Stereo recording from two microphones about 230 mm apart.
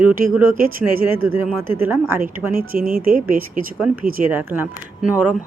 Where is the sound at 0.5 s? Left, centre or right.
Right.